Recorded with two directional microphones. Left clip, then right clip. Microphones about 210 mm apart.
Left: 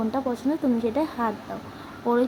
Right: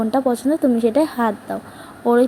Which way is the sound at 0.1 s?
25° right (ahead or behind).